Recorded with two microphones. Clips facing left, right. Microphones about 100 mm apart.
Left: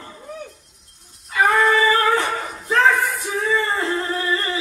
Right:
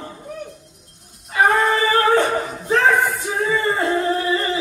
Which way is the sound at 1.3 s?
35° right (ahead or behind).